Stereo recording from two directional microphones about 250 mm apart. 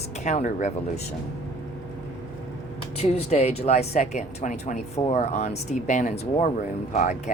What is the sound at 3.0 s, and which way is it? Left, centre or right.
Speech, left.